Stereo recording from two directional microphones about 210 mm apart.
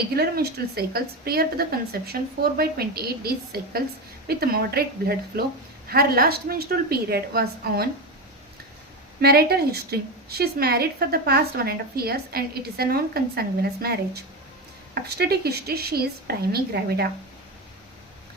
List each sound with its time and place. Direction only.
0.1 s a woman's voice: 50° right (ahead or behind)
9.2 s a woman's voice: 50° right (ahead or behind)
15.2 s a woman's voice: 50° right (ahead or behind)